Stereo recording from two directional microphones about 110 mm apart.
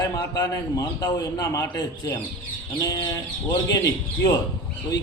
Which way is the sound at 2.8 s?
40° left (ahead or behind).